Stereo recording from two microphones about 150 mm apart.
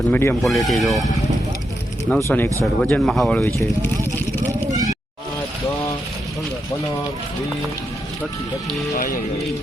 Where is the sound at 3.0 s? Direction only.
Centre (ahead or behind).